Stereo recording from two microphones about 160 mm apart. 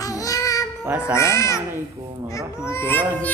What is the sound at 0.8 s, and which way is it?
Speech, 10° right (ahead or behind).